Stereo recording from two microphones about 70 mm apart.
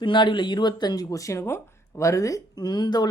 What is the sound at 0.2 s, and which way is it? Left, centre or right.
Speech, left.